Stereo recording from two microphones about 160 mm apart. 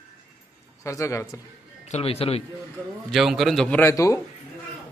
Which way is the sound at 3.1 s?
Centre (ahead or behind).